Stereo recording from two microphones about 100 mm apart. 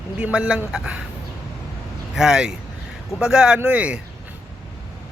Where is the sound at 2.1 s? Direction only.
5° right (ahead or behind).